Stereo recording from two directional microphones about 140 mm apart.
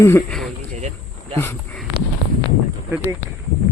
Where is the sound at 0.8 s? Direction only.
50° right (ahead or behind).